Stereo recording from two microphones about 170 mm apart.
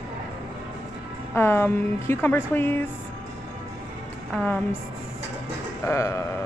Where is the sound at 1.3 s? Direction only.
15° left (ahead or behind).